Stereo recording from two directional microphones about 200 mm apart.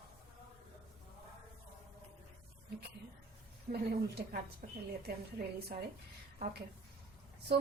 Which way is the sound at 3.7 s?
50° right (ahead or behind).